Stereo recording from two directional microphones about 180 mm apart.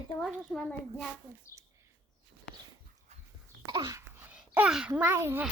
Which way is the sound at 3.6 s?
25° right (ahead or behind).